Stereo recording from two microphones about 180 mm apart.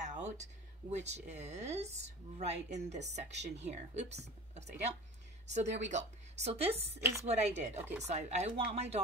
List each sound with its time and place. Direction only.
0.0 s speech: 45° right (ahead or behind)